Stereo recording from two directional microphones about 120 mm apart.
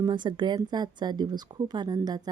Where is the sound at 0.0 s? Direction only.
40° right (ahead or behind).